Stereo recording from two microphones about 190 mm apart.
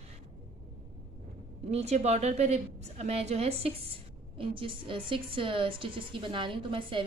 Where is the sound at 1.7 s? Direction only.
35° right (ahead or behind).